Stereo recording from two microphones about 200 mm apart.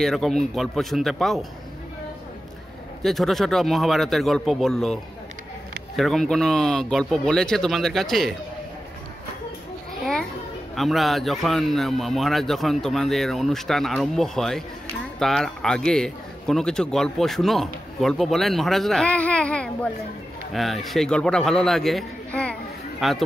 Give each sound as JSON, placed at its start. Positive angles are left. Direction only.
{"t": 0.0, "sound": "a man's voice", "side_deg": 0}
{"t": 3.0, "sound": "a man's voice", "side_deg": 0}
{"t": 5.9, "sound": "a man's voice", "side_deg": 0}
{"t": 10.8, "sound": "a man's voice", "side_deg": 0}